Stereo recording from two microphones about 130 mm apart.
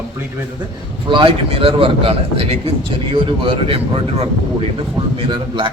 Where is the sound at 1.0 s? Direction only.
40° right (ahead or behind).